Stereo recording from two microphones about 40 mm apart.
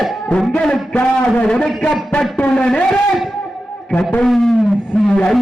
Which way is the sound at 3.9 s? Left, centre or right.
Left.